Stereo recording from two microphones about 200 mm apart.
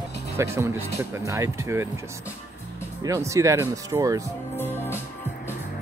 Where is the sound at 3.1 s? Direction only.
15° right (ahead or behind).